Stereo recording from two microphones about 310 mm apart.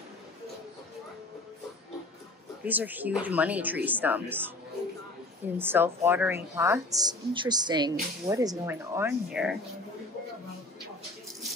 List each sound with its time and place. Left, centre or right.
2.6 s a woman's voice: centre
5.6 s a woman's voice: centre